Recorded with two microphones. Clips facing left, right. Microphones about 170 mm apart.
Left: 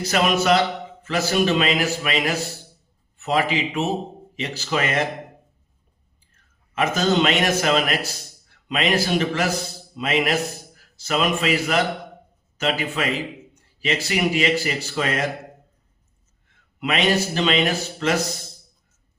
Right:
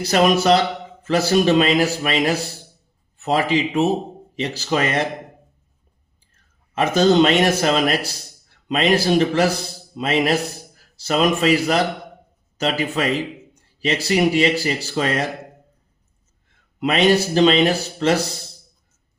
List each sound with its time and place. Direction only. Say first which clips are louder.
0.0 s speech: right 4 dB; 35° right (ahead or behind)
6.3 s a man's voice: right 3 dB; 35° right (ahead or behind)
16.8 s speech: right 5 dB; 35° right (ahead or behind)